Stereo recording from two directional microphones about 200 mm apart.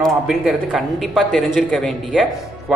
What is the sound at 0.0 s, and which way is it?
A man's voice, centre (ahead or behind).